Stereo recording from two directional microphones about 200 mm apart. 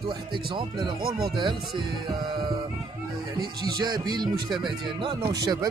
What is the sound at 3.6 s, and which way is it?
Speech, 20° right (ahead or behind).